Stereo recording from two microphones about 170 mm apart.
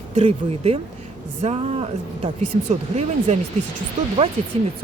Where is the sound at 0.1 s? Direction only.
40° right (ahead or behind).